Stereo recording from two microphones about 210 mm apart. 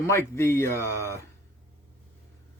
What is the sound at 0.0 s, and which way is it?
Speech, 10° left (ahead or behind).